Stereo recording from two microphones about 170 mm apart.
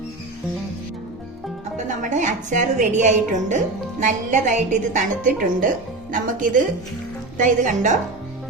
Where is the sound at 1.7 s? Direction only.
45° right (ahead or behind).